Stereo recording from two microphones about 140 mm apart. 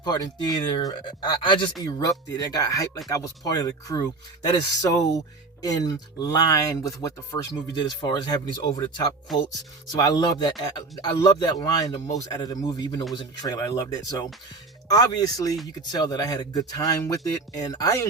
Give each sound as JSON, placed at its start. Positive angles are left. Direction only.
{"t": 0.0, "sound": "speech", "side_deg": 30}